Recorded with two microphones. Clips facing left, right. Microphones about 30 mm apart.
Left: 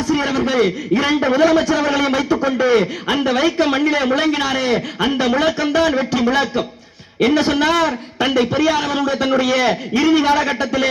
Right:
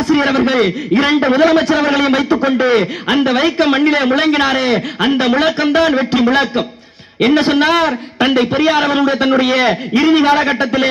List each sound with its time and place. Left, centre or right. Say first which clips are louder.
0.0 s a man's voice: right 5 dB; right